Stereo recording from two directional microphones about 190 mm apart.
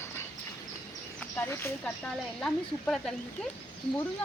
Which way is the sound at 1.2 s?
15° left (ahead or behind).